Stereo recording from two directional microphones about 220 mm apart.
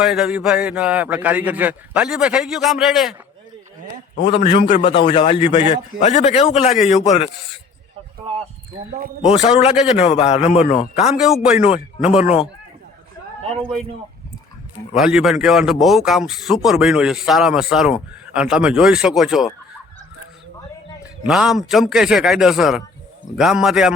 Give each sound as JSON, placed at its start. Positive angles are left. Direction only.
{"t": 0.0, "sound": "a man's voice", "side_deg": -5}
{"t": 4.1, "sound": "a man's voice", "side_deg": 50}
{"t": 4.4, "sound": "a man's voice", "side_deg": 25}
{"t": 4.8, "sound": "a man's voice", "side_deg": 50}
{"t": 5.0, "sound": "a man's voice", "side_deg": 25}
{"t": 8.3, "sound": "speech", "side_deg": -20}
{"t": 9.2, "sound": "a man's voice", "side_deg": 30}
{"t": 11.1, "sound": "a man's voice", "side_deg": -5}
{"t": 14.9, "sound": "a man's voice", "side_deg": 0}
{"t": 21.0, "sound": "a man's voice", "side_deg": -5}